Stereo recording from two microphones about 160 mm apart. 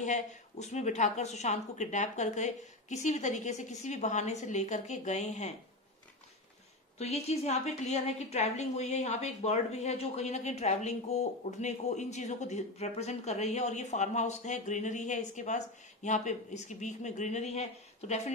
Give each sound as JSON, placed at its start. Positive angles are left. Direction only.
{"t": 0.0, "sound": "a woman's voice", "side_deg": 50}
{"t": 7.0, "sound": "a woman's voice", "side_deg": 40}